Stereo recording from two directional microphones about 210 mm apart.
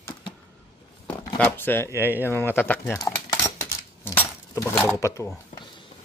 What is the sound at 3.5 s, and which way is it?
Coin, 10° left (ahead or behind).